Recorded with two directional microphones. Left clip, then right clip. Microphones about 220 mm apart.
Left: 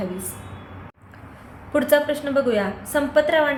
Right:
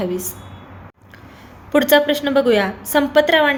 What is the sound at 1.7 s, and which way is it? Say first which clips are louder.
A woman's voice: right 5 dB; 40° right (ahead or behind).